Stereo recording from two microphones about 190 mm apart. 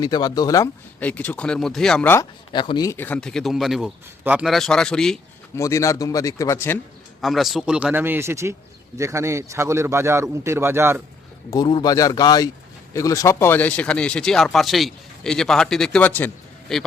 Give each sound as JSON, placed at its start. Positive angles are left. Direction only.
{"t": 0.0, "sound": "speech", "side_deg": 20}
{"t": 2.5, "sound": "speech", "side_deg": 25}
{"t": 5.5, "sound": "speech", "side_deg": 15}
{"t": 7.2, "sound": "a man's voice", "side_deg": 0}
{"t": 11.5, "sound": "speech", "side_deg": 20}